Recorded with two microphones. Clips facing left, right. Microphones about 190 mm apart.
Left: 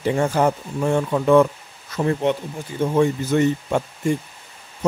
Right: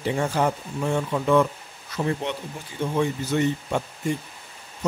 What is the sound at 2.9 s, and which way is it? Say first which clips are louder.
Speech: left 5 dB; 50° left (ahead or behind).